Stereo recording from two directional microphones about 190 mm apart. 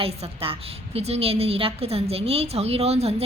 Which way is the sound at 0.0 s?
30° right (ahead or behind).